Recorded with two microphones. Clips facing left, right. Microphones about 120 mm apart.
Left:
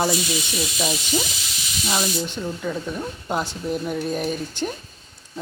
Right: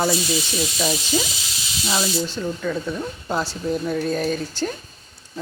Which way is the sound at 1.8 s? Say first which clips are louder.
Right 1 dB; 20° left (ahead or behind).